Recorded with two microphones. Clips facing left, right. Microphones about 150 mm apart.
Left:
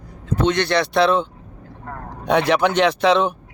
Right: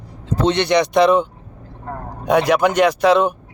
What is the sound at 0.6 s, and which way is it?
Speech, 15° right (ahead or behind).